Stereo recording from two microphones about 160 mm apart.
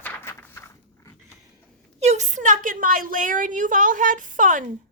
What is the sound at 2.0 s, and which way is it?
A woman's voice, 45° right (ahead or behind).